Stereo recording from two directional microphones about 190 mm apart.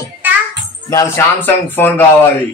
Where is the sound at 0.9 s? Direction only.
15° left (ahead or behind).